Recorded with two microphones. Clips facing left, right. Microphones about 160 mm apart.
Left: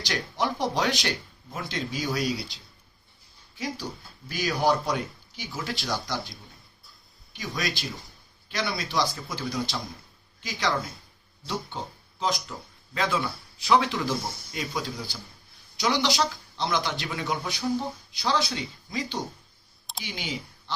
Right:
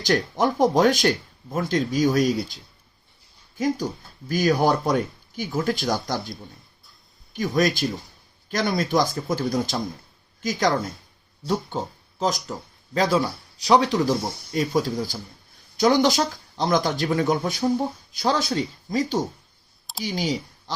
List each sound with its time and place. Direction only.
0.0 s speech: 50° right (ahead or behind)
3.6 s speech: 50° right (ahead or behind)
7.3 s speech: 50° right (ahead or behind)